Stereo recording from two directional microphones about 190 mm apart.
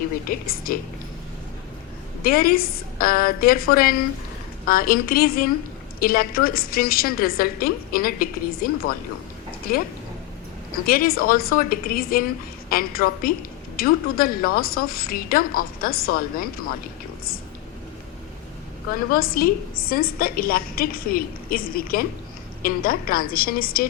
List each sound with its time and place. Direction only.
0.3 s a woman's voice: 50° left (ahead or behind)
2.2 s a woman's voice: 50° left (ahead or behind)
10.8 s a woman's voice: 50° left (ahead or behind)
19.1 s a woman's voice: 50° left (ahead or behind)